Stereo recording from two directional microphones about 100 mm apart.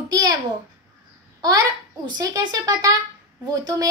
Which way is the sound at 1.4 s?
40° right (ahead or behind).